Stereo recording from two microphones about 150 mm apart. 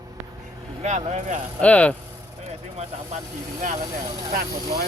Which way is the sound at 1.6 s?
10° left (ahead or behind).